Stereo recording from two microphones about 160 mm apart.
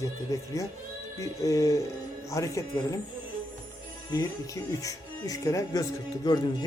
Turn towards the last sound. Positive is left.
turn(degrees=25)  # may be behind; listen again after turning